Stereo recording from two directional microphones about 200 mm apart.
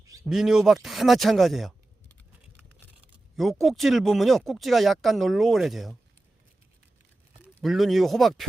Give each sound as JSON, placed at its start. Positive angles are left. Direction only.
{"t": 0.0, "sound": "a sound", "side_deg": -15}
{"t": 0.3, "sound": "speech", "side_deg": 0}
{"t": 3.3, "sound": "speech", "side_deg": 0}
{"t": 7.6, "sound": "speech", "side_deg": 0}